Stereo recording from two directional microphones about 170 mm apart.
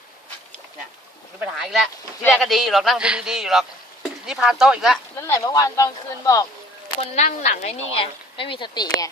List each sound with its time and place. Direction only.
1.5 s a man's voice: centre (ahead or behind)
5.2 s speech: 20° left (ahead or behind)
7.0 s speech: 40° left (ahead or behind); by 9.0 s 25° left (ahead or behind)